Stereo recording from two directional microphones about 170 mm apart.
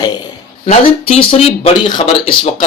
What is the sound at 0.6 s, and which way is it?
Speech, 40° left (ahead or behind).